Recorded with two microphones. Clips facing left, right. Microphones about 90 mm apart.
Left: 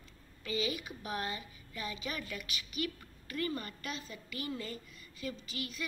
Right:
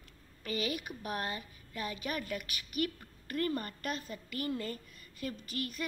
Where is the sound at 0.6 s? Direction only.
50° right (ahead or behind).